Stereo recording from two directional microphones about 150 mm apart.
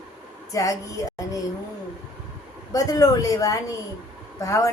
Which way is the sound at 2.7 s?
25° left (ahead or behind).